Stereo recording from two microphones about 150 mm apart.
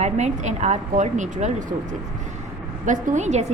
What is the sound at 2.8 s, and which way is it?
Speech, 55° right (ahead or behind).